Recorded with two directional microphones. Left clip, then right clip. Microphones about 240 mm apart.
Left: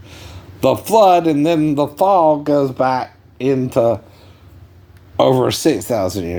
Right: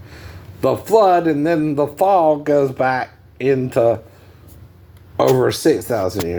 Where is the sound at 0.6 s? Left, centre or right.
Left.